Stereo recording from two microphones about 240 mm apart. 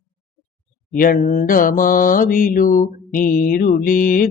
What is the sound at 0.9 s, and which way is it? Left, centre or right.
Mantra, left.